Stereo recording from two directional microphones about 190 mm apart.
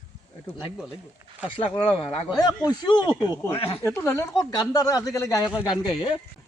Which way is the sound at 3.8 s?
15° left (ahead or behind).